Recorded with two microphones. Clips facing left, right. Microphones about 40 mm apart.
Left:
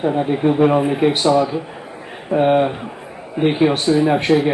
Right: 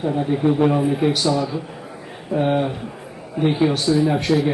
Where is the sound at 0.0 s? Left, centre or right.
Left.